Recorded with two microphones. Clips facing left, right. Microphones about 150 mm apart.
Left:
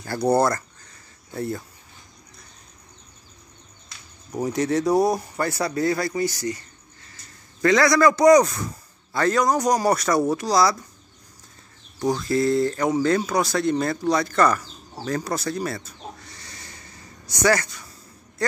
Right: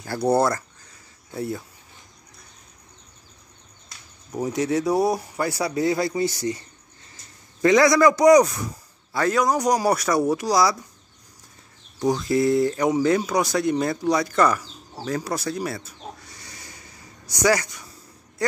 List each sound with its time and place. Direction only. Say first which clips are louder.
0.0 s speech: even; 5° right (ahead or behind)
4.3 s a man's voice: even; 5° right (ahead or behind); by 6.6 s 25° right (ahead or behind)
7.6 s a man's voice: right 1 dB; 15° right (ahead or behind)
12.0 s a man's voice: right 1 dB; 20° right (ahead or behind)
15.0 s bird: even; 5° right (ahead or behind)
17.3 s a man's voice: even; 15° right (ahead or behind)